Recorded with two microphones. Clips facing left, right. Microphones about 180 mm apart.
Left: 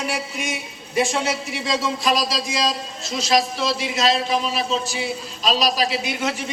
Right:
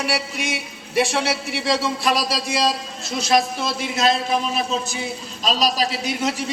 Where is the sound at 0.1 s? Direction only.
70° right (ahead or behind).